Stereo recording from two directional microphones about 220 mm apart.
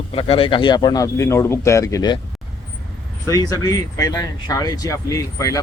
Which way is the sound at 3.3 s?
15° left (ahead or behind).